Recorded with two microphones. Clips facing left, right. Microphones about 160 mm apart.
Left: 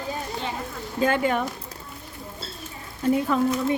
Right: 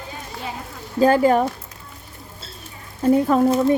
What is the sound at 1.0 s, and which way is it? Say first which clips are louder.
Speech: right 7 dB; 35° right (ahead or behind).